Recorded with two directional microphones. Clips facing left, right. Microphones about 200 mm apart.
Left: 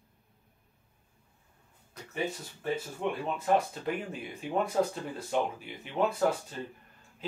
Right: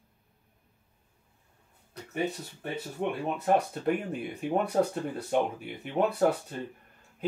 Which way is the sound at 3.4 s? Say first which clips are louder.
Right 2 dB; 50° right (ahead or behind).